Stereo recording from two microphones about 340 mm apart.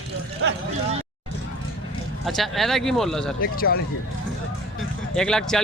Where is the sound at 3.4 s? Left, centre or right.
Left.